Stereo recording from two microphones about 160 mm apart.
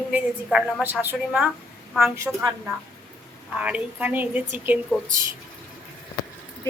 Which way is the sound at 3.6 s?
10° right (ahead or behind).